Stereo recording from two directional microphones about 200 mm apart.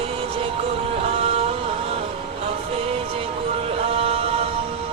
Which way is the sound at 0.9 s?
30° right (ahead or behind).